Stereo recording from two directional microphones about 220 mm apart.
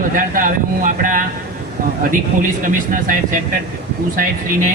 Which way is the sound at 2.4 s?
35° right (ahead or behind).